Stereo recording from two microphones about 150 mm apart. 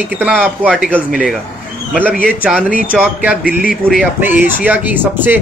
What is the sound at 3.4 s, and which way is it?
Speech, 70° left (ahead or behind).